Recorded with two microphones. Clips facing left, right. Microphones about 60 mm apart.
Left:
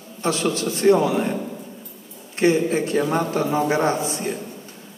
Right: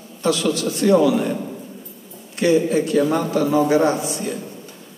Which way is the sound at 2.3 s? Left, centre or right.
Left.